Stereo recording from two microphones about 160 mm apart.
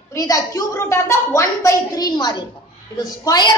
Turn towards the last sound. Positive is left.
turn(degrees=25)  # may be behind; listen again after turning